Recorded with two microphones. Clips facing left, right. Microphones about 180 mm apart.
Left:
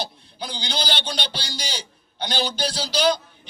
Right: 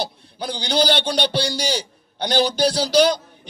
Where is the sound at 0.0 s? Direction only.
60° right (ahead or behind).